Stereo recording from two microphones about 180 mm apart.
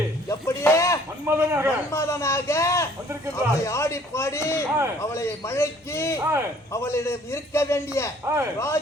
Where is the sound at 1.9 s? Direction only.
15° left (ahead or behind).